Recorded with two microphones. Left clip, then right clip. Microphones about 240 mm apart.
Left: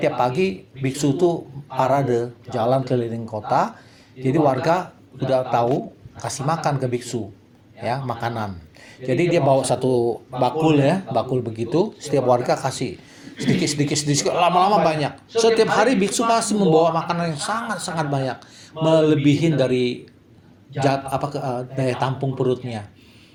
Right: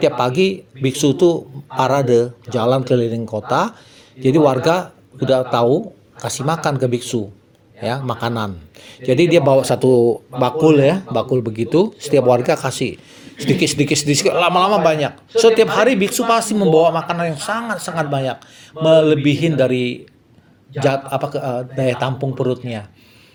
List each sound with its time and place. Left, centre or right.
0.0 s a man's voice: right